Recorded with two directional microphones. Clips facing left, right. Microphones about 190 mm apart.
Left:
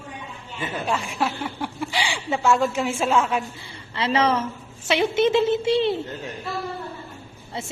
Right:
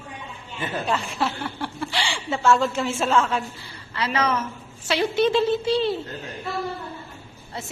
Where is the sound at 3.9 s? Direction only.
25° left (ahead or behind).